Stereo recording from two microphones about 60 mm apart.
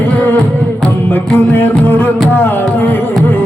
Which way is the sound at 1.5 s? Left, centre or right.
Left.